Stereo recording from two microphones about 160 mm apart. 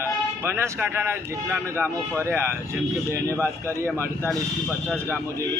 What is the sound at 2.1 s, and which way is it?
Speech, 15° right (ahead or behind).